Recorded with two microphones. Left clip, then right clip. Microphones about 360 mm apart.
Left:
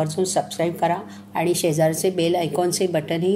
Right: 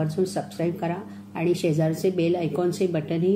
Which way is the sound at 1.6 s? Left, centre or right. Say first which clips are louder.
Left 5 dB; left.